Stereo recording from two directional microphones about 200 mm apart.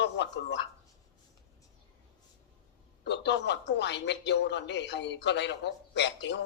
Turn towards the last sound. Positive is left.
turn(degrees=60)  # may be behind; listen again after turning